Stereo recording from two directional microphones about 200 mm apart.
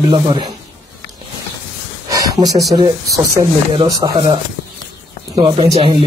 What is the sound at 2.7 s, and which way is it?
A man's voice, 20° right (ahead or behind).